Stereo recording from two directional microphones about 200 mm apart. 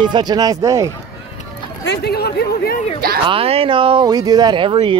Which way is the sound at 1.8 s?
55° left (ahead or behind).